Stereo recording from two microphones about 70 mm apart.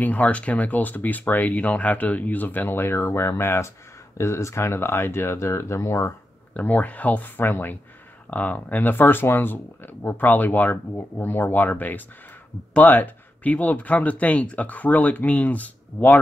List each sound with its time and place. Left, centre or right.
0.0 s speech: left
6.5 s speech: left